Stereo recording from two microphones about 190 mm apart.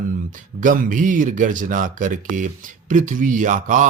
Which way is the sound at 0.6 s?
45° right (ahead or behind).